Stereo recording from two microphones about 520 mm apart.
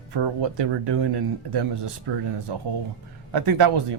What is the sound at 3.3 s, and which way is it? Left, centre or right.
Speech, right.